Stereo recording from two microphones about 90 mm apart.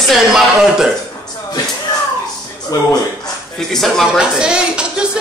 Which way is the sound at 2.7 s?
40° left (ahead or behind).